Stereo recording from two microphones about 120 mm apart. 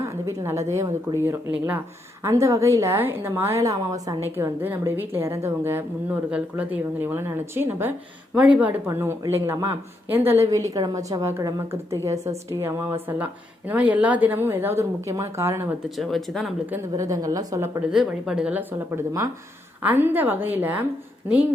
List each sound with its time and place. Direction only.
0.0 s a sound: 25° right (ahead or behind)
0.7 s a woman's voice: 25° right (ahead or behind)
2.2 s a woman's voice: 25° right (ahead or behind)
16.0 s speech: centre (ahead or behind)
17.0 s a woman's voice: 30° right (ahead or behind)
17.9 s a woman's voice: 5° right (ahead or behind)
18.9 s a woman's voice: 25° right (ahead or behind)